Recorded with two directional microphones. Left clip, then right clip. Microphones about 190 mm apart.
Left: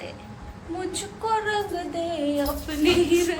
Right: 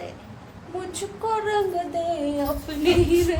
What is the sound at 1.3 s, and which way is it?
Speech, 15° right (ahead or behind).